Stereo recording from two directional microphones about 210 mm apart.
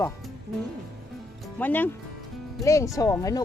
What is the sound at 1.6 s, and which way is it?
Speech, 10° left (ahead or behind).